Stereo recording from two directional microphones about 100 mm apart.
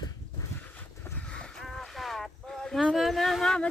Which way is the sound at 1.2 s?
10° left (ahead or behind).